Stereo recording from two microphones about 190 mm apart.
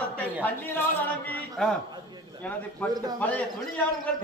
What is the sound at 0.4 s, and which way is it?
A man's voice, 10° left (ahead or behind).